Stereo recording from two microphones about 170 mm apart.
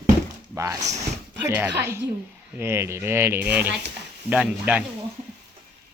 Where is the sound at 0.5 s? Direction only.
15° right (ahead or behind).